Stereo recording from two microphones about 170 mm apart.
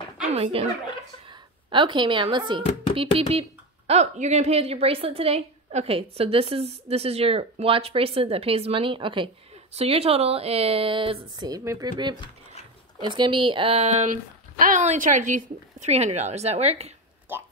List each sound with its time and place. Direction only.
0.3 s speech: 35° right (ahead or behind)
1.7 s speech: 30° right (ahead or behind)